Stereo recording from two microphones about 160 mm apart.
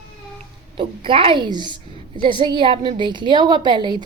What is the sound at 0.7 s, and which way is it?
A woman's voice, 35° right (ahead or behind).